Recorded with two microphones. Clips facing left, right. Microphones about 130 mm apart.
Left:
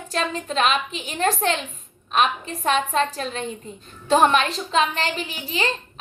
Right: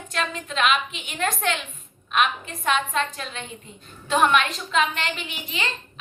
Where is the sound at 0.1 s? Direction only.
35° left (ahead or behind).